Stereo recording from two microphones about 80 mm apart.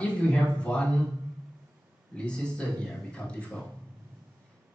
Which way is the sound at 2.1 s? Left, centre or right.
Centre.